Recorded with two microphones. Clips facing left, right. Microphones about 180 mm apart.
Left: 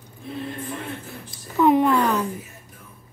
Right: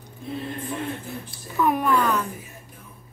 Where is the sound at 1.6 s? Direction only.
20° left (ahead or behind).